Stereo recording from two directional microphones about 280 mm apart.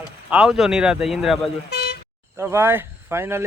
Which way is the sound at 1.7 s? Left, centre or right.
Left.